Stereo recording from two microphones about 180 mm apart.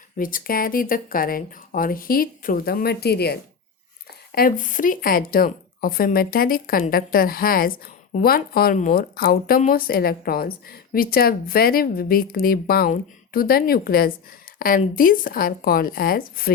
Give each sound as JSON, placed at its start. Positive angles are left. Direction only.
{"t": 0.2, "sound": "speech", "side_deg": 50}
{"t": 4.4, "sound": "speech", "side_deg": 50}